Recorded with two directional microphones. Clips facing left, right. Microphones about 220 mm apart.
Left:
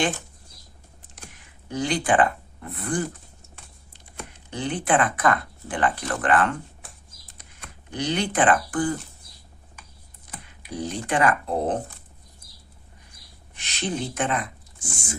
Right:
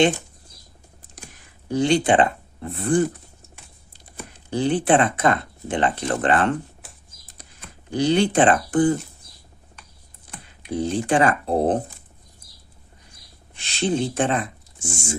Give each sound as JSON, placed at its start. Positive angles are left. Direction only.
{"t": 1.6, "sound": "speech", "side_deg": -30}
{"t": 4.5, "sound": "speech", "side_deg": -30}
{"t": 6.8, "sound": "typing", "side_deg": 0}
{"t": 7.9, "sound": "speech", "side_deg": -30}
{"t": 10.7, "sound": "speech", "side_deg": -25}
{"t": 13.5, "sound": "speech", "side_deg": -30}